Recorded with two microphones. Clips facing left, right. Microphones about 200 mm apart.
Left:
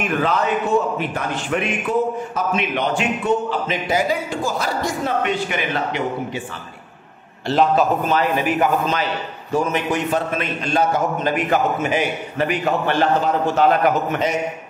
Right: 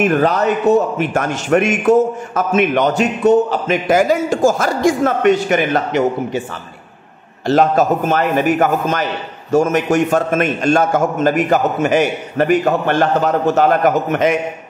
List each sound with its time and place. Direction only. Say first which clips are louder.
0.0 s a man's voice: right 6 dB; 40° right (ahead or behind)
7.4 s a man's voice: right 4 dB; 45° right (ahead or behind)